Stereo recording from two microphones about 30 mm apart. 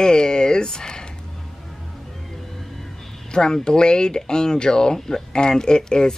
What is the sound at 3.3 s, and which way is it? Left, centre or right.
Speech, left.